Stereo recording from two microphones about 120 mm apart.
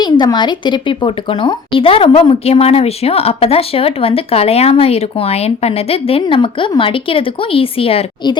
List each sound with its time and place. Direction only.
0.0 s a woman's voice: 35° left (ahead or behind)